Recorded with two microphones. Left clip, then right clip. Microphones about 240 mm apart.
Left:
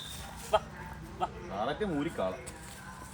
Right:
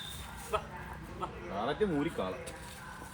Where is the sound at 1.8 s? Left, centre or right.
Centre.